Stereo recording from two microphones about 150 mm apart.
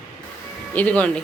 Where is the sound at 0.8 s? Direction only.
10° left (ahead or behind).